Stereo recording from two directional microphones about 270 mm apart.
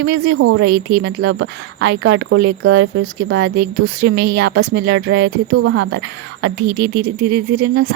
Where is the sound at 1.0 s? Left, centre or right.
Right.